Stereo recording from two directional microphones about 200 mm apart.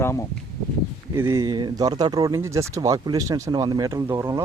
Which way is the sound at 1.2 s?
15° right (ahead or behind).